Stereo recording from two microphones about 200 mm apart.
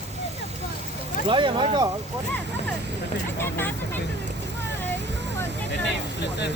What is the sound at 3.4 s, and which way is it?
Speech, 10° left (ahead or behind).